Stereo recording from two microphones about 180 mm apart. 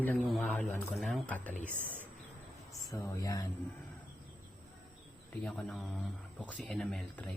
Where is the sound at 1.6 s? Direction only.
10° right (ahead or behind).